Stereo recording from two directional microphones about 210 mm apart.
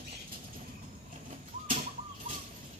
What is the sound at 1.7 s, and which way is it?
Bird, 40° right (ahead or behind).